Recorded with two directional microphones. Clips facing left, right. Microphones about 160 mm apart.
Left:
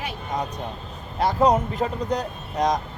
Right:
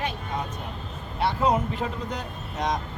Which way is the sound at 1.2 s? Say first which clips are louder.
Left 4 dB; 40° left (ahead or behind).